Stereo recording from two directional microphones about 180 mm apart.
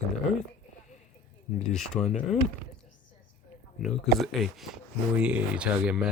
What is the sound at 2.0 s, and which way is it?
Speech, 40° left (ahead or behind).